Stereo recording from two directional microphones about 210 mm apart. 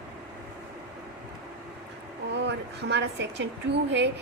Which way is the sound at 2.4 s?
55° right (ahead or behind).